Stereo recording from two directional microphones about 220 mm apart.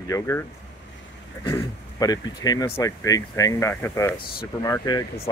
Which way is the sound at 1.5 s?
15° left (ahead or behind).